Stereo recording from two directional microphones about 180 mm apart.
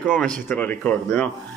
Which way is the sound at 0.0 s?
5° left (ahead or behind).